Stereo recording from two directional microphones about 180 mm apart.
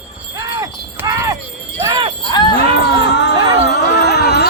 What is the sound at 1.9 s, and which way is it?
Jingle bell, 25° right (ahead or behind).